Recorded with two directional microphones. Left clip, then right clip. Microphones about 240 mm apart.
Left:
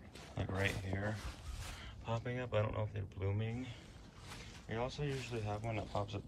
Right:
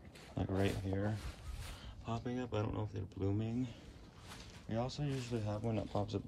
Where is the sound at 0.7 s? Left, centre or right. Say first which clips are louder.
Right 1 dB; centre.